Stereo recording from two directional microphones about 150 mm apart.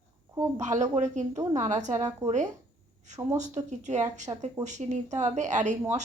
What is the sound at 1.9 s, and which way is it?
Speech, 20° right (ahead or behind).